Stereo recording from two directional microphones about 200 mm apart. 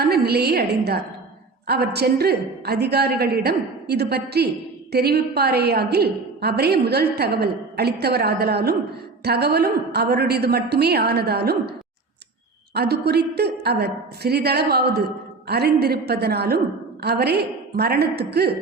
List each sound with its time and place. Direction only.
0.0 s a woman's voice: 50° right (ahead or behind)
12.7 s a woman's voice: 55° right (ahead or behind)